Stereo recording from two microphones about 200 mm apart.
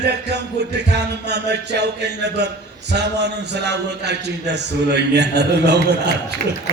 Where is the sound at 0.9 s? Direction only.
55° right (ahead or behind).